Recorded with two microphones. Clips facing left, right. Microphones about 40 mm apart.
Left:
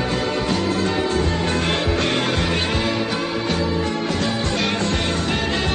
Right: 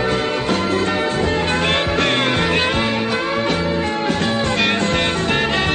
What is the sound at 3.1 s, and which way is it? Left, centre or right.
Music, right.